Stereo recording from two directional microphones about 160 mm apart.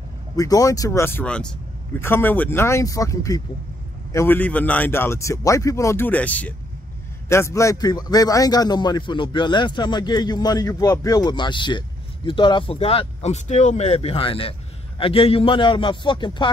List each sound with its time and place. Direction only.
0.4 s a man's voice: 20° left (ahead or behind)